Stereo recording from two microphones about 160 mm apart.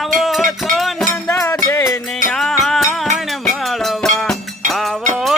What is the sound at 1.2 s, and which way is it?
Music, 20° left (ahead or behind).